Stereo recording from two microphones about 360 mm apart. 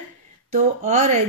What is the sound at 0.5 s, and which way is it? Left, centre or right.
Speech, centre.